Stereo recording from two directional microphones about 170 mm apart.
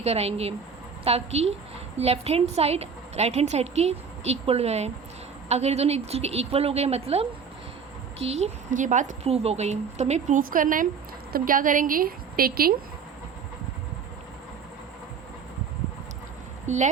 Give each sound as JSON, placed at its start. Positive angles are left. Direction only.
{"t": 0.0, "sound": "a woman's voice", "side_deg": -40}
{"t": 16.6, "sound": "speech", "side_deg": -45}